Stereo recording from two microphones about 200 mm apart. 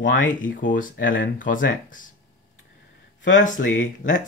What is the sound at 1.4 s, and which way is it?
Speech, 45° left (ahead or behind).